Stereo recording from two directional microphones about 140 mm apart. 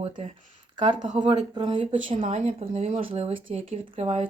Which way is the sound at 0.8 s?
35° right (ahead or behind).